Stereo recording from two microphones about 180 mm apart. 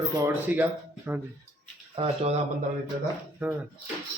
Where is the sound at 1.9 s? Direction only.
35° right (ahead or behind).